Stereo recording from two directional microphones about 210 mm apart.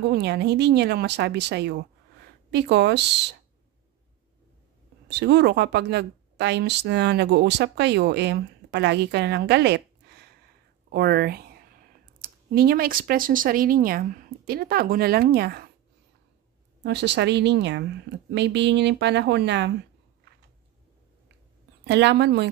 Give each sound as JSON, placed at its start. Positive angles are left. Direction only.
{"t": 0.1, "sound": "speech", "side_deg": -55}
{"t": 5.0, "sound": "speech", "side_deg": -55}
{"t": 16.8, "sound": "speech", "side_deg": -55}
{"t": 21.8, "sound": "speech", "side_deg": -55}